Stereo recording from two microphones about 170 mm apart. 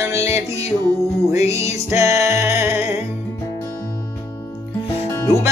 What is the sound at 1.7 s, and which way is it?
Music, 15° right (ahead or behind).